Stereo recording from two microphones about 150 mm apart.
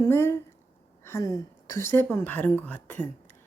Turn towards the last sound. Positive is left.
turn(degrees=10)  # may be behind; listen again after turning